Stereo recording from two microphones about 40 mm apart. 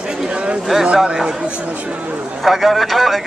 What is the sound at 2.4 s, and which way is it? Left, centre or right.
Speech, centre.